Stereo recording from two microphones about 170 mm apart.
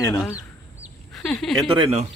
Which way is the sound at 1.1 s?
5° left (ahead or behind).